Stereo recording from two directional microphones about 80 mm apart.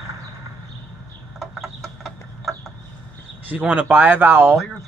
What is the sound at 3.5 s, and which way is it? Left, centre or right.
Speech, right.